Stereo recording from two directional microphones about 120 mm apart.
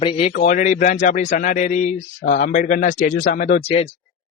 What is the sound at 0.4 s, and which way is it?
A man's voice, 90° left.